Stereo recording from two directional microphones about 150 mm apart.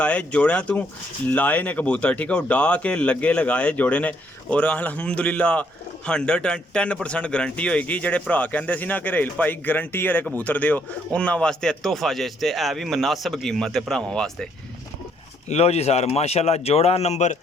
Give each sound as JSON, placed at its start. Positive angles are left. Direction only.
{"t": 0.0, "sound": "a man's voice", "side_deg": 10}
{"t": 15.4, "sound": "speech", "side_deg": 45}